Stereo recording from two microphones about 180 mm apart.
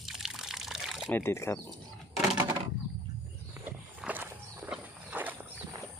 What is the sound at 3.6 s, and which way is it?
Walk, 10° right (ahead or behind).